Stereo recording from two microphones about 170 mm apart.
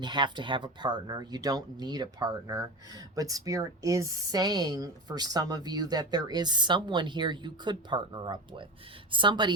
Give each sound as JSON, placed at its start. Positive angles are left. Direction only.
{"t": 0.0, "sound": "speech", "side_deg": -25}